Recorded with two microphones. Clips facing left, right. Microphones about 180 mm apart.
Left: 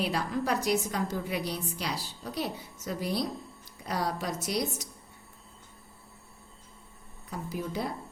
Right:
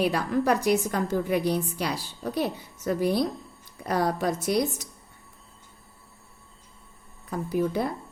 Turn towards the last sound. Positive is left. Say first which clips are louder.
# right 8 dB
turn(degrees=-55)  # may be behind; listen again after turning